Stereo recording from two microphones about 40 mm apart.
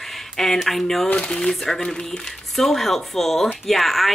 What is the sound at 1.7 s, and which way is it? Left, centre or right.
Speech, centre.